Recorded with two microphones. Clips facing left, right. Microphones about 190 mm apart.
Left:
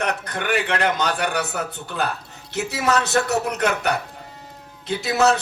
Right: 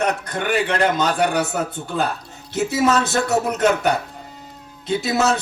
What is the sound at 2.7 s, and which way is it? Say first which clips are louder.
A man's voice: right 2 dB; 65° left (ahead or behind).